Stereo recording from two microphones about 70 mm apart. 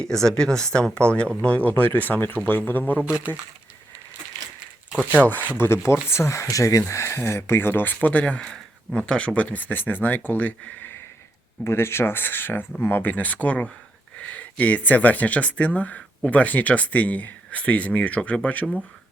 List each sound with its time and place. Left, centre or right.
0.0 s speech: centre; by 3.0 s left
3.0 s speech: centre
4.6 s crumpling: centre
5.5 s speech: left
11.6 s speech: left; by 18.7 s centre